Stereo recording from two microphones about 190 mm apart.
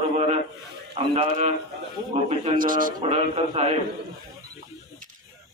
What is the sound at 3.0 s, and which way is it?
Speech, 30° right (ahead or behind).